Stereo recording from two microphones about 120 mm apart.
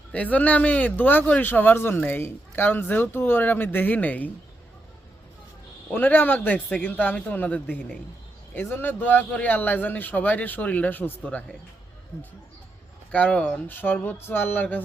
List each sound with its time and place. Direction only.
0.1 s speech: 10° left (ahead or behind)
5.9 s speech: 15° left (ahead or behind)
13.1 s speech: 10° left (ahead or behind)